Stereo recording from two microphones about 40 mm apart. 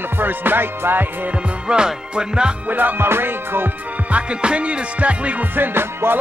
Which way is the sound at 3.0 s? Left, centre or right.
Right.